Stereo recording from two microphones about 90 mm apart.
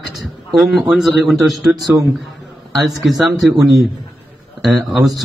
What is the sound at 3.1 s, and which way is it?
Speech, 45° right (ahead or behind).